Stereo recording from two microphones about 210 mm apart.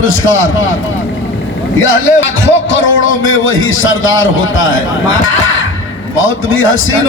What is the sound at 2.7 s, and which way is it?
A man's voice, 70° left (ahead or behind).